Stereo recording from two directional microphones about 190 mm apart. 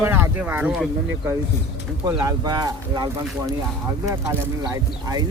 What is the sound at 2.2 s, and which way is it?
Speech, 20° right (ahead or behind).